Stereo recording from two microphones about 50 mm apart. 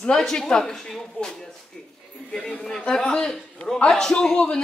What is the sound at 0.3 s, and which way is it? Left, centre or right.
A woman's voice, centre.